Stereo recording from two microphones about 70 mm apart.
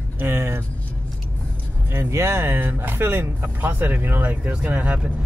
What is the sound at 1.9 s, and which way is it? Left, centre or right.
Speech, right.